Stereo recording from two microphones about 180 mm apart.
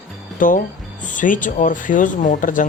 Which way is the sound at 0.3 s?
45° left (ahead or behind).